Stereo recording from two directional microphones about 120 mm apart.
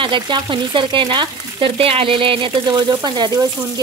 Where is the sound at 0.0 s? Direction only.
45° right (ahead or behind).